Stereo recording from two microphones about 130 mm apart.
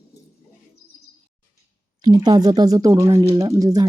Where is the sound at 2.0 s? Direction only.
30° right (ahead or behind).